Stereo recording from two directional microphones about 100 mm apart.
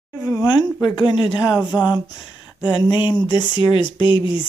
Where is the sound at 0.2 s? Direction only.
30° left (ahead or behind).